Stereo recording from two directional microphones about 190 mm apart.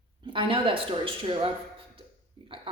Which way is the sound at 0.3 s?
25° right (ahead or behind).